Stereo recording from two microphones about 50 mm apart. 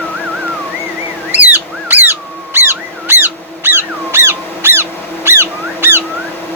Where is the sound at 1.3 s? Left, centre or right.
Right.